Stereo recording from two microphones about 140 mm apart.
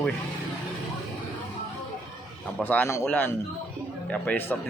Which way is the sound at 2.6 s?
15° left (ahead or behind).